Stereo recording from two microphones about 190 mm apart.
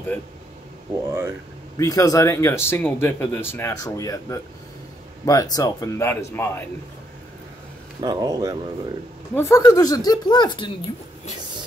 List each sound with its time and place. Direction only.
1.8 s speech: 15° left (ahead or behind)
8.0 s speech: 20° right (ahead or behind)
9.3 s speech: 15° left (ahead or behind)